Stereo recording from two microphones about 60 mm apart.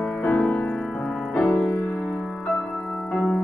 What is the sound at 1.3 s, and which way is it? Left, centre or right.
Piano, centre.